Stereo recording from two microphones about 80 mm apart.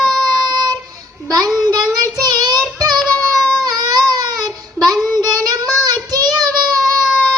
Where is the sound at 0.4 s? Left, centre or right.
Right.